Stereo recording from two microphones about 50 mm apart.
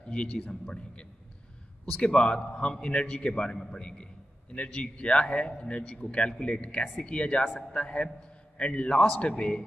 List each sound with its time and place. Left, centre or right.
0.0 s a man's voice: left